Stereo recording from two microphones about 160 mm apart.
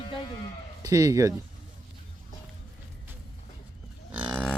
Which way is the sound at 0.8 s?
20° right (ahead or behind).